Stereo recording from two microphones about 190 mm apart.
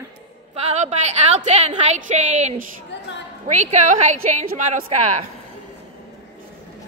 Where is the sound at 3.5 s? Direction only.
40° right (ahead or behind).